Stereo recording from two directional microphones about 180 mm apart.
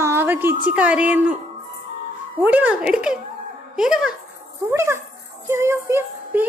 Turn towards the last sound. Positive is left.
turn(degrees=-15)  # may be behind; listen again after turning